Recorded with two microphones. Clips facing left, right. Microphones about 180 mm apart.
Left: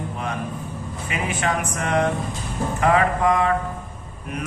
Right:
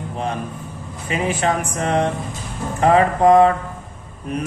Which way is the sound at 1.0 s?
35° right (ahead or behind).